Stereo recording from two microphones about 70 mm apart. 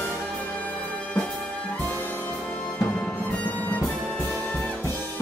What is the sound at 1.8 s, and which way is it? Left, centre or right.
Music, left.